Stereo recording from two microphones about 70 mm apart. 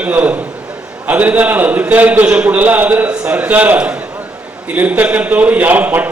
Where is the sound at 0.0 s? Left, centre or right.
Right.